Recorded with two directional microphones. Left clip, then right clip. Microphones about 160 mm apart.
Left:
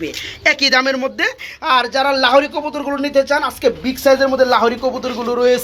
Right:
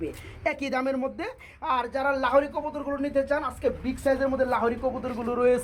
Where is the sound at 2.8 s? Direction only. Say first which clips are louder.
Left 12 dB; 30° left (ahead or behind).